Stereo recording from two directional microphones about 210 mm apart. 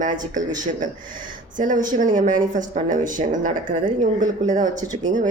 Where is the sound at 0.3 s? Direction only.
40° right (ahead or behind).